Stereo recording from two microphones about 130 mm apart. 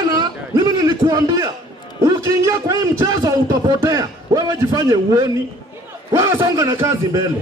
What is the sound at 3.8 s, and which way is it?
A man's voice, 25° right (ahead or behind).